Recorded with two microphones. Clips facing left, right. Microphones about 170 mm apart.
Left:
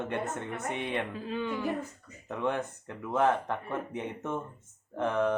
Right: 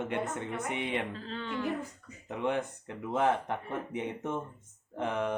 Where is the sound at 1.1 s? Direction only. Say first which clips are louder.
Left 5 dB; 10° left (ahead or behind).